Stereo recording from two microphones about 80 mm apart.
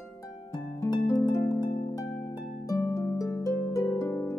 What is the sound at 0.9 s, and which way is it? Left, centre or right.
Harp, left.